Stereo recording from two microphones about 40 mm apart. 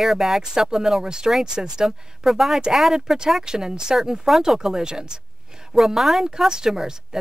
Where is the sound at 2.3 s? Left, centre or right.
Centre.